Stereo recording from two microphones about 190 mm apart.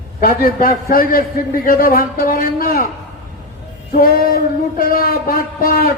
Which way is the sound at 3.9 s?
50° left (ahead or behind).